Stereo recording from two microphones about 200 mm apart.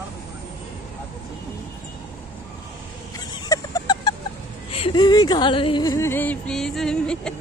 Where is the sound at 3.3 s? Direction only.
20° left (ahead or behind).